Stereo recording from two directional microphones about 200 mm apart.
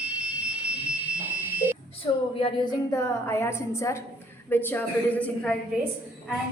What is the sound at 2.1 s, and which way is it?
A woman's voice, 20° left (ahead or behind).